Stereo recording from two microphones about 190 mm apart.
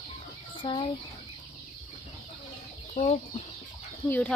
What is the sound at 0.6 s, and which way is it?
Speech, 25° left (ahead or behind).